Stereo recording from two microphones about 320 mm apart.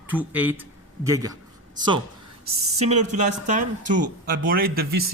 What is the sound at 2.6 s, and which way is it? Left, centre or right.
Speech, centre.